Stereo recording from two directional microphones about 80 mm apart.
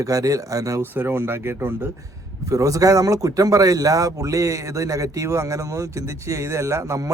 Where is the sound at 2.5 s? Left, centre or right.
Right.